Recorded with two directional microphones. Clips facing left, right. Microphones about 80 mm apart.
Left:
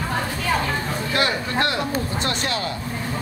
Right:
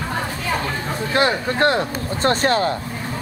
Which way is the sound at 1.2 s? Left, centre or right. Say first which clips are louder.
Right 5 dB; right.